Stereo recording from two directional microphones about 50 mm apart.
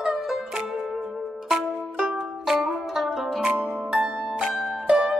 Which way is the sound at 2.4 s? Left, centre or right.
Centre.